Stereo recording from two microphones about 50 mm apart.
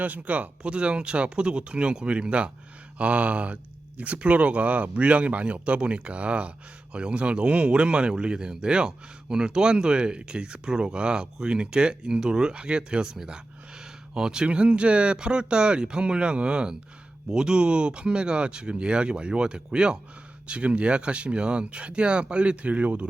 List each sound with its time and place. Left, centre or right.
0.0 s speech: right